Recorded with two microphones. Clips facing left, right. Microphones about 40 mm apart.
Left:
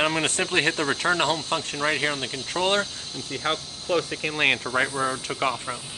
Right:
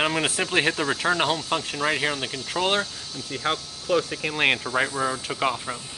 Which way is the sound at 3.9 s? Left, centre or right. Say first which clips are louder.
Right 1 dB; centre.